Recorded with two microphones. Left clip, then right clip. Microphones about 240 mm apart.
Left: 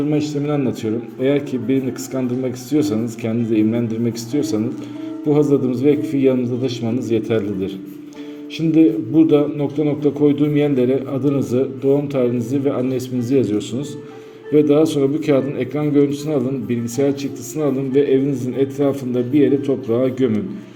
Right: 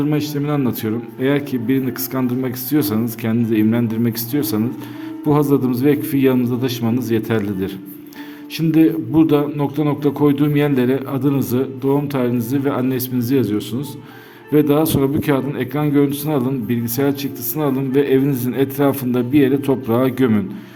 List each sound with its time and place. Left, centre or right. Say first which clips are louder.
0.0 s speech: even; right